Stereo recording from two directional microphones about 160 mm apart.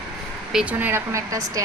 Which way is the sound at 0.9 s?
20° right (ahead or behind).